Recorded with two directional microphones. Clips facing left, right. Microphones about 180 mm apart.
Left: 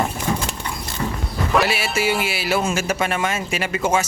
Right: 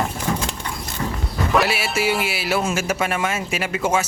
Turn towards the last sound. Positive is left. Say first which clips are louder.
# left 1 dB
turn(degrees=0)  # may be behind; listen again after turning